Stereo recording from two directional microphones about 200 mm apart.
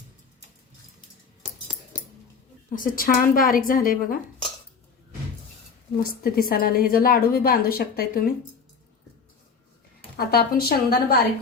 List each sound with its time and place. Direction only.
2.7 s a woman's voice: 45° left (ahead or behind)
6.2 s a woman's voice: 45° left (ahead or behind)
10.2 s a woman's voice: 50° left (ahead or behind)